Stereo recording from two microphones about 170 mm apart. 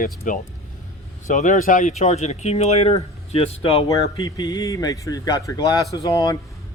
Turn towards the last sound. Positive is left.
turn(degrees=20)  # may be behind; listen again after turning